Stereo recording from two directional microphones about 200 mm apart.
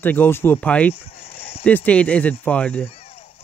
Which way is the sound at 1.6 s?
5° left (ahead or behind).